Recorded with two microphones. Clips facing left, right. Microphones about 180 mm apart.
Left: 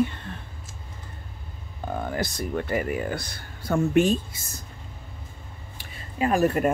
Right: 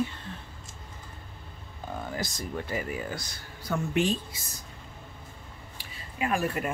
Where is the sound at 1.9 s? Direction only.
60° left (ahead or behind).